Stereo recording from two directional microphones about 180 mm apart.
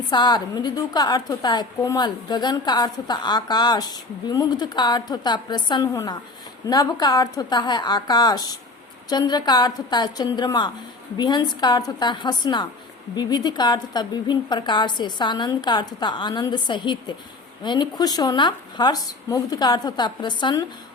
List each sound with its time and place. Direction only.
0.1 s a woman's voice: 25° left (ahead or behind)